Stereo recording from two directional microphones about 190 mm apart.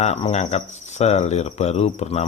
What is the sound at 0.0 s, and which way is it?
Speech, 35° left (ahead or behind).